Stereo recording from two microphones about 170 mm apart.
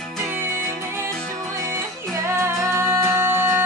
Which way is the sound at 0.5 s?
15° right (ahead or behind).